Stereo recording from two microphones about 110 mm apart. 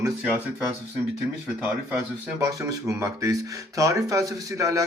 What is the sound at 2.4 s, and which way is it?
Speech, 30° right (ahead or behind).